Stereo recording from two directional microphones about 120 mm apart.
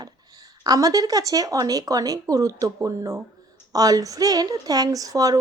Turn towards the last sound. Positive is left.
turn(degrees=-30)  # may be behind; listen again after turning